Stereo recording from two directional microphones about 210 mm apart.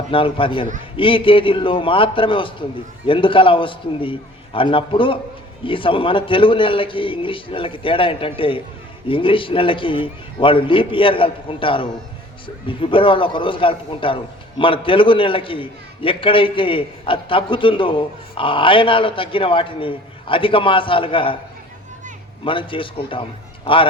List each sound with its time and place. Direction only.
0.1 s a man's voice: 25° left (ahead or behind)
22.4 s a man's voice: 25° left (ahead or behind)